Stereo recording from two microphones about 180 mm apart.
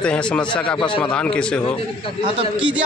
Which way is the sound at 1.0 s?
5° left (ahead or behind).